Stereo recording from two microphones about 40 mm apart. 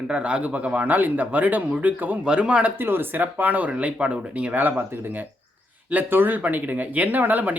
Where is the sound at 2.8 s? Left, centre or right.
Right.